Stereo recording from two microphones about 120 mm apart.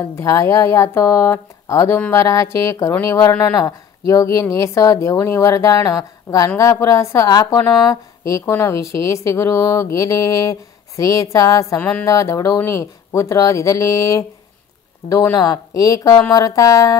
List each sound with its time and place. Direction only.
0.0 s a woman's voice: 25° left (ahead or behind)